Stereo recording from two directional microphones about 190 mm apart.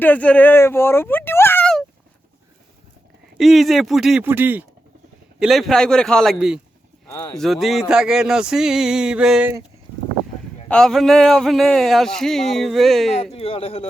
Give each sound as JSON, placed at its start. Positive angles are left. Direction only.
{"t": 0.0, "sound": "speech", "side_deg": 10}
{"t": 3.3, "sound": "speech", "side_deg": 0}
{"t": 5.4, "sound": "speech", "side_deg": 0}
{"t": 7.3, "sound": "speech", "side_deg": 0}
{"t": 10.7, "sound": "speech", "side_deg": 5}
{"t": 13.3, "sound": "speech", "side_deg": 30}